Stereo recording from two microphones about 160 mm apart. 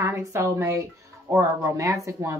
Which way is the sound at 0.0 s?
15° right (ahead or behind).